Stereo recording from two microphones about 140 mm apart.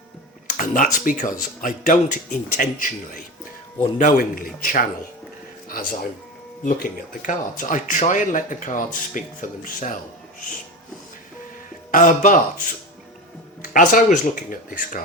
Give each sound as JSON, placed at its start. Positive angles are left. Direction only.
{"t": 0.5, "sound": "speech", "side_deg": 70}
{"t": 6.7, "sound": "speech", "side_deg": 70}
{"t": 11.9, "sound": "speech", "side_deg": 70}
{"t": 13.6, "sound": "speech", "side_deg": 80}